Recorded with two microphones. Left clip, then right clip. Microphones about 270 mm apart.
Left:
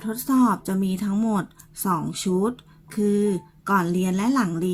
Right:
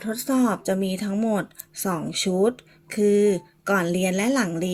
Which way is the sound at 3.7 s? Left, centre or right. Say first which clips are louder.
Even; centre.